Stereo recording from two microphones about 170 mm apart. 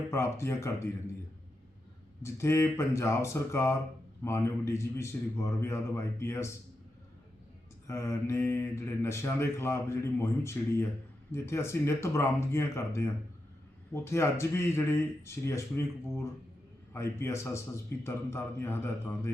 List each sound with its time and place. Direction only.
0.1 s speech: 15° left (ahead or behind)
2.2 s speech: 15° left (ahead or behind)
7.9 s speech: 15° left (ahead or behind)